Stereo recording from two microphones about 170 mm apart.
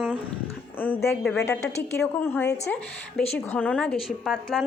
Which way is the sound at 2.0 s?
10° left (ahead or behind).